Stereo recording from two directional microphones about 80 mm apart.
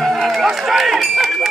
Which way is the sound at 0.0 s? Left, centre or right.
Centre.